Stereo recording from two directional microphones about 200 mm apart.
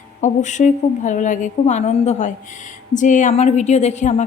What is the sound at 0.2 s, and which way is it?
A woman's voice, 35° left (ahead or behind).